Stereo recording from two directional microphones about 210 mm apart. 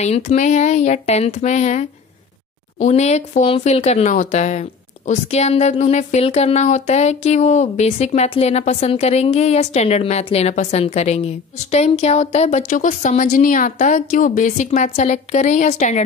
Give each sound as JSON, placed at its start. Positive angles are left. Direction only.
{"t": 0.0, "sound": "speech", "side_deg": 30}